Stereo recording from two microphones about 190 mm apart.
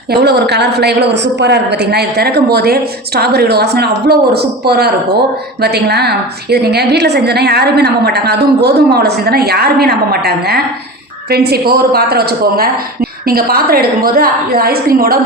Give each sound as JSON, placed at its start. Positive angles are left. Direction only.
{"t": 0.1, "sound": "a woman's voice", "side_deg": -60}